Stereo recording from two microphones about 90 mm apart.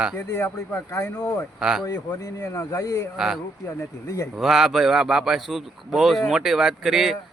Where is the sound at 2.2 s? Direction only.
30° left (ahead or behind).